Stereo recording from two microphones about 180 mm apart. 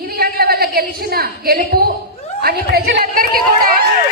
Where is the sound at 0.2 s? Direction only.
60° right (ahead or behind).